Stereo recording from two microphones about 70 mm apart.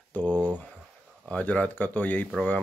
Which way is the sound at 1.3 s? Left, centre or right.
Centre.